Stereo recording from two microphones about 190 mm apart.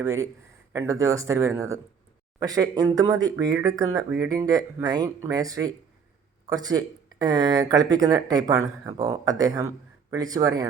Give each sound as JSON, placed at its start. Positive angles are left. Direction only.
{"t": 0.0, "sound": "speech", "side_deg": -15}